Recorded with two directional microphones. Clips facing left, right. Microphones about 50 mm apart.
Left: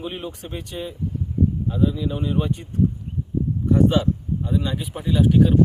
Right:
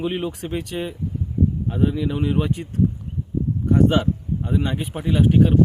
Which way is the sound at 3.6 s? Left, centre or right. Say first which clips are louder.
Right 1 dB; right.